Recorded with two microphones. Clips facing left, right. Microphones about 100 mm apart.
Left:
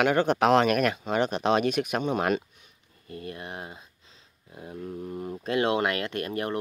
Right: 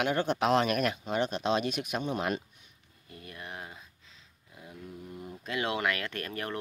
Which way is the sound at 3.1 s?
45° left (ahead or behind).